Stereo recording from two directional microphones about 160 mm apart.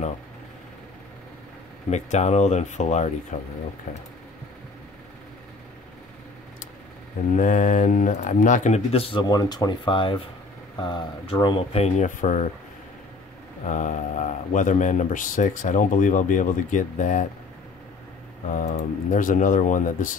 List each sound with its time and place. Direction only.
1.9 s speech: 45° left (ahead or behind)
7.3 s speech: 50° left (ahead or behind); by 9.2 s 35° left (ahead or behind)
9.2 s speech: 25° left (ahead or behind); by 12.4 s 50° left (ahead or behind)
13.7 s speech: 50° left (ahead or behind)
18.5 s speech: 50° left (ahead or behind)